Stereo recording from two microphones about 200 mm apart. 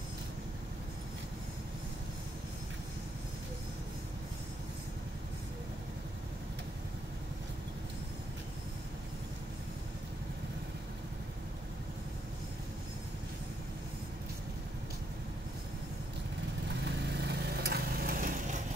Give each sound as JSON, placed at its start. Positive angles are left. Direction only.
{"t": 16.6, "sound": "vehicle", "side_deg": -60}